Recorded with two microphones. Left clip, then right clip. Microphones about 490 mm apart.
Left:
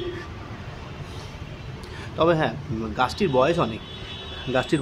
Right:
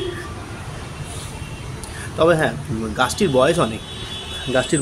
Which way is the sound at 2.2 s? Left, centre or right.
Left.